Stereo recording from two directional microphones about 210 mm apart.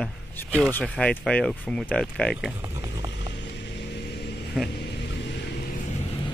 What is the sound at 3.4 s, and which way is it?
Music, 55° left (ahead or behind).